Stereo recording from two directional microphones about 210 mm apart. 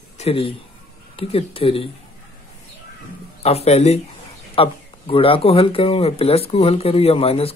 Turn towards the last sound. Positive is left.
turn(degrees=30)  # may be behind; listen again after turning